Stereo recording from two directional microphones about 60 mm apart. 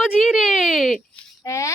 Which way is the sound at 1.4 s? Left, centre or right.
Left.